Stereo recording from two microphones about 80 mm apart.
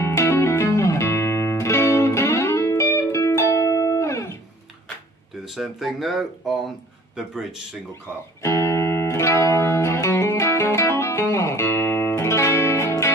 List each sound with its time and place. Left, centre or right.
0.0 s music: left
5.6 s speech: centre
8.4 s music: left